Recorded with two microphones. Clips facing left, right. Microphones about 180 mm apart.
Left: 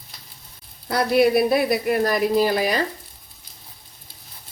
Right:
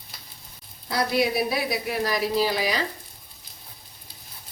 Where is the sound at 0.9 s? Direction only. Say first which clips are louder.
Left 6 dB; 55° left (ahead or behind).